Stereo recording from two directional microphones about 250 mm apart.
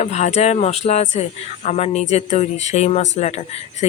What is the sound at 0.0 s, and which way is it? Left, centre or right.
Speech, left.